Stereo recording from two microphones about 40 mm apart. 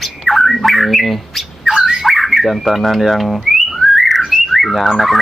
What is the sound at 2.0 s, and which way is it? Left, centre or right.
Whistling, centre.